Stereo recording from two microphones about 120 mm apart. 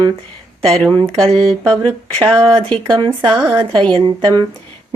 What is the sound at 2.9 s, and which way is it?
Speech, 40° right (ahead or behind).